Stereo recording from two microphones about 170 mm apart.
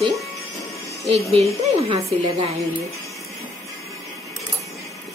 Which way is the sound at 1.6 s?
35° right (ahead or behind).